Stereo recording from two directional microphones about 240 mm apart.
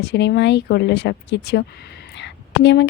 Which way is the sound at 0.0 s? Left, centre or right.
Left.